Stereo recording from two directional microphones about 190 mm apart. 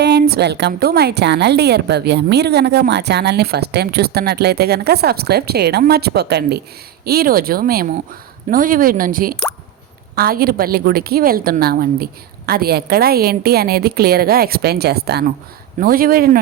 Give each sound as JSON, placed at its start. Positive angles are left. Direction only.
{"t": 0.0, "sound": "a woman's voice", "side_deg": -60}